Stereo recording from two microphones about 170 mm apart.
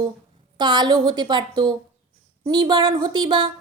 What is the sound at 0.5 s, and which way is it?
A woman's voice, 25° right (ahead or behind).